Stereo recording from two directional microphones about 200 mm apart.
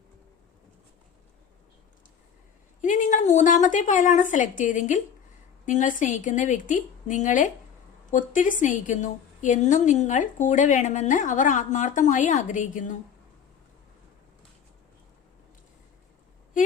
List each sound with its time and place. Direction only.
2.8 s a woman's voice: 40° left (ahead or behind)